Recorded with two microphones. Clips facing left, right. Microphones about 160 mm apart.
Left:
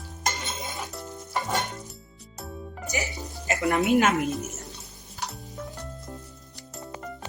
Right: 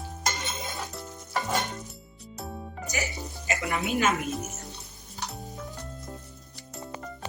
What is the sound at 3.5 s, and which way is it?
Music, 45° left (ahead or behind).